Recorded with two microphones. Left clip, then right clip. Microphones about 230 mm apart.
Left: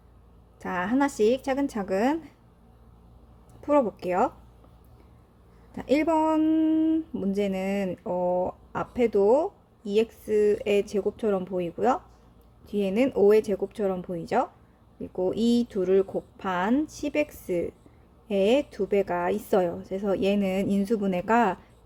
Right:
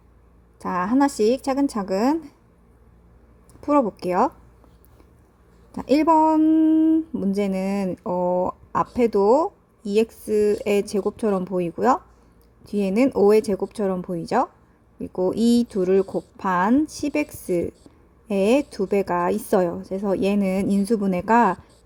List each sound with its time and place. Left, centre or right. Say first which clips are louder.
0.6 s a woman's voice: right 5 dB; centre
3.6 s speech: right 3 dB; centre
5.7 s a woman's voice: right 6 dB; centre